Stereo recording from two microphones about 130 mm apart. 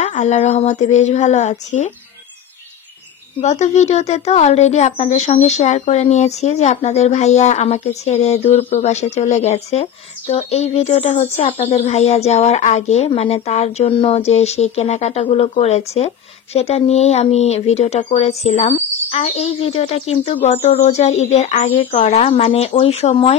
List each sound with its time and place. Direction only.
0.0 s speech: 60° left (ahead or behind)
3.3 s speech: 60° left (ahead or behind)